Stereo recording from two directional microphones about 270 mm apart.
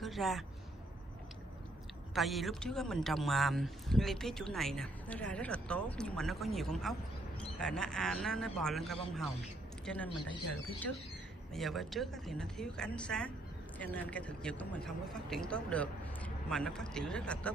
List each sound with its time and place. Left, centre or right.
0.0 s a woman's voice: centre
2.1 s speech: centre
11.5 s speech: centre